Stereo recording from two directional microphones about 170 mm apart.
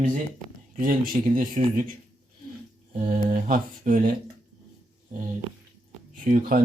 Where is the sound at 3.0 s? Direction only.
50° right (ahead or behind).